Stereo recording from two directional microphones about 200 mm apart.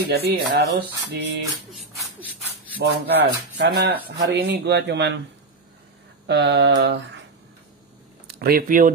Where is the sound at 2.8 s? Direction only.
55° right (ahead or behind).